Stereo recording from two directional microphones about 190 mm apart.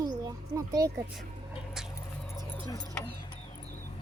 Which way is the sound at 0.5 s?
20° right (ahead or behind).